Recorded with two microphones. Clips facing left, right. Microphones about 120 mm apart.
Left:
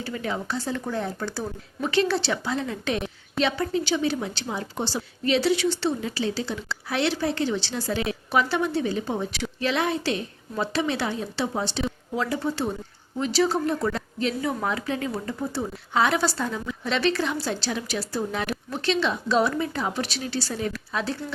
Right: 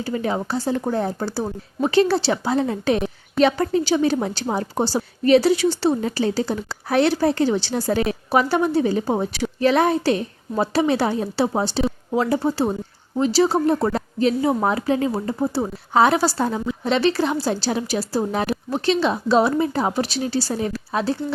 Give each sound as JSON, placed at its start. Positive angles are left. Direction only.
{"t": 0.0, "sound": "speech", "side_deg": -30}